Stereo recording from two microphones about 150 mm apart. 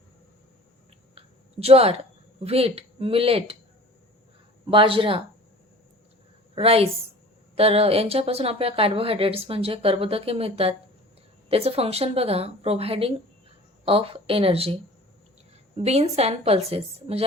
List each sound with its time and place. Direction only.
1.1 s a sound: 40° right (ahead or behind)
2.4 s speech: 40° right (ahead or behind)
4.6 s speech: 35° right (ahead or behind)
6.6 s speech: 40° right (ahead or behind)
15.8 s a woman's voice: 45° right (ahead or behind)